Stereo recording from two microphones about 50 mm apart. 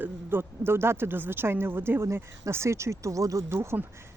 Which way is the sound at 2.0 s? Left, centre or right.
Right.